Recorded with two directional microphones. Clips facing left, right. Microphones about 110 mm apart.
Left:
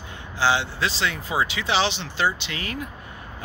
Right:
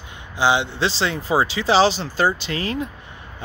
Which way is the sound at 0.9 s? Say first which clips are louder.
Right 5 dB; 30° right (ahead or behind).